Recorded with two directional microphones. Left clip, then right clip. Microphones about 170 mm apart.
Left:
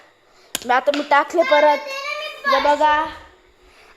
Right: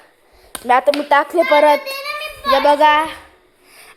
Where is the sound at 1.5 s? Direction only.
25° right (ahead or behind).